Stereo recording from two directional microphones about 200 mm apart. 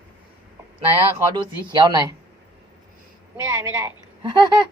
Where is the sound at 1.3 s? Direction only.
20° right (ahead or behind).